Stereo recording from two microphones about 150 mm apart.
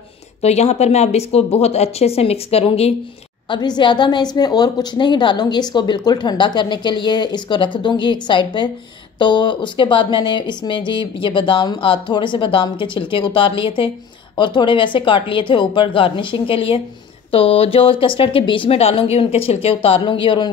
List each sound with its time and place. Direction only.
0.4 s speech: 45° left (ahead or behind)
3.4 s a woman's voice: 30° left (ahead or behind)